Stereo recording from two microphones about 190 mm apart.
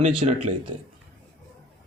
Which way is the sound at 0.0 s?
35° right (ahead or behind).